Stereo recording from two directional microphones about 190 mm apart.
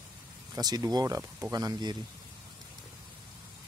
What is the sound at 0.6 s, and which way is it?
Speech, 20° right (ahead or behind).